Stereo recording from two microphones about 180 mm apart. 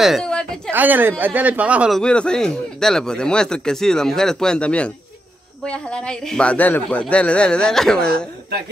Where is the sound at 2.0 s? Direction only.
5° left (ahead or behind).